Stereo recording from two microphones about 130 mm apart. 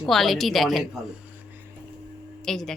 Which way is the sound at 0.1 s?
Centre (ahead or behind).